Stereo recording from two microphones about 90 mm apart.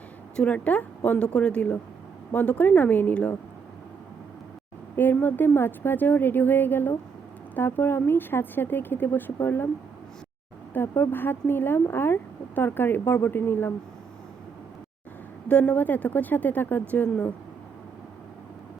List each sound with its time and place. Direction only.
0.3 s a woman's voice: 15° left (ahead or behind)
4.9 s speech: 20° left (ahead or behind)
10.8 s speech: 25° left (ahead or behind)
15.4 s speech: 15° left (ahead or behind)